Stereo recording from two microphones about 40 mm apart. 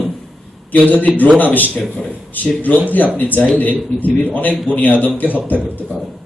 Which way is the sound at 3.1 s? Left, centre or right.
Left.